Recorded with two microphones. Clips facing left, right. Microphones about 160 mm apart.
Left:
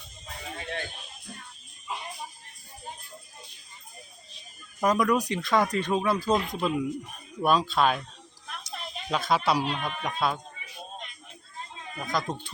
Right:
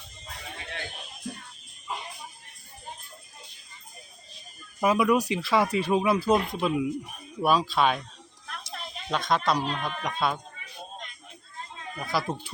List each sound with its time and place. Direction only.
4.8 s speech: 10° right (ahead or behind)
11.9 s speech: 5° right (ahead or behind)